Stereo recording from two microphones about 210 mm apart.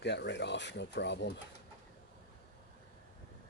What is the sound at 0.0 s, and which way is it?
Speech, 55° left (ahead or behind).